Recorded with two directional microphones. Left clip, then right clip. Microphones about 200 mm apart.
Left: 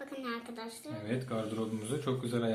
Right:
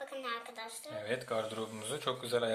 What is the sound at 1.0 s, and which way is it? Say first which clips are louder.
A man's voice: right 1 dB; 50° right (ahead or behind).